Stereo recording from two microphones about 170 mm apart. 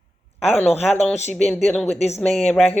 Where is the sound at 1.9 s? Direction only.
40° left (ahead or behind).